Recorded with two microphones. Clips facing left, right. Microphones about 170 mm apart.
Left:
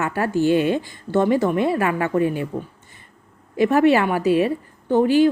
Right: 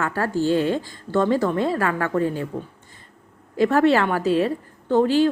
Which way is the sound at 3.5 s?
15° left (ahead or behind).